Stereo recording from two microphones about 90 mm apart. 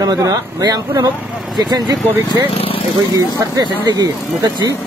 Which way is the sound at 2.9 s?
45° right (ahead or behind).